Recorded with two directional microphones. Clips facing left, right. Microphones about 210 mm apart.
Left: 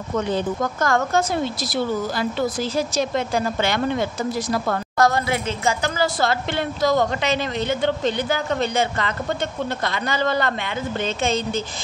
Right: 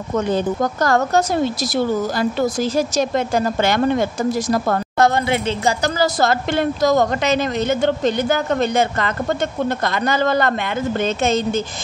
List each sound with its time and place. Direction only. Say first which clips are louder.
0.3 s a woman's voice: right 4 dB; 35° right (ahead or behind)
4.9 s a woman's voice: right 2 dB; 25° right (ahead or behind)
5.9 s a woman's voice: right 4 dB; 45° right (ahead or behind)